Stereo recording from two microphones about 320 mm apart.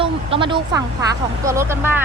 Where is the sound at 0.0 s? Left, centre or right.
Centre.